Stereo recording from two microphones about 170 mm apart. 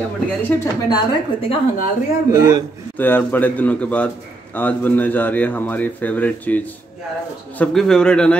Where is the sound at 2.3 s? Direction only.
15° right (ahead or behind).